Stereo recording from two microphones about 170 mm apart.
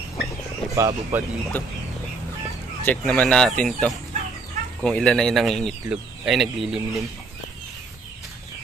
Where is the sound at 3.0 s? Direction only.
10° left (ahead or behind).